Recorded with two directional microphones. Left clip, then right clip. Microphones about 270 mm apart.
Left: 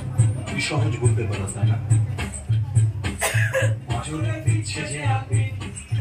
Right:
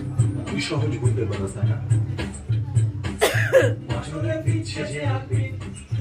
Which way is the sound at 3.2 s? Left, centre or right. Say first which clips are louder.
Right 6 dB; right.